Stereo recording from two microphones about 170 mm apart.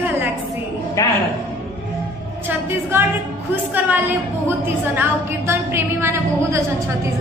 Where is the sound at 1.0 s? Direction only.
20° left (ahead or behind).